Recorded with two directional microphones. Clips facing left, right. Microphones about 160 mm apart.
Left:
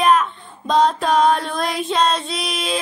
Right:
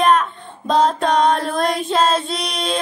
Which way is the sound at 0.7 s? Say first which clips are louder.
Even; centre (ahead or behind).